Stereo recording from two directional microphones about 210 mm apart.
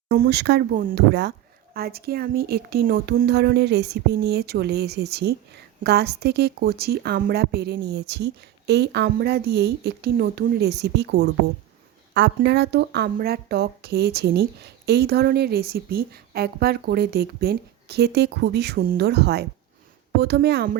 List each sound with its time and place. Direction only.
0.1 s a woman's voice: 50° right (ahead or behind)